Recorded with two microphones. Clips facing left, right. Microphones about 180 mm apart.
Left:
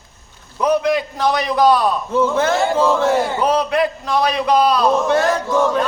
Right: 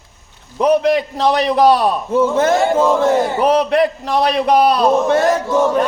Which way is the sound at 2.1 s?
15° right (ahead or behind).